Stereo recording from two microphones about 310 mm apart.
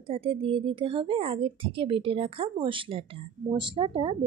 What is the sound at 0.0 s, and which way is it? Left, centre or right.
A woman's voice, centre.